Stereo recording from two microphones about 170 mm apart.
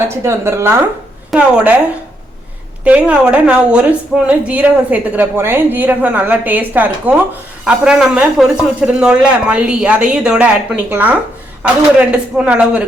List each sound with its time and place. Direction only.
0.1 s a woman's voice: 15° right (ahead or behind)
2.8 s a woman's voice: 5° right (ahead or behind)